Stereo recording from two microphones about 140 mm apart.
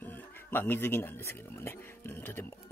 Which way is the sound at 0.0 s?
15° left (ahead or behind).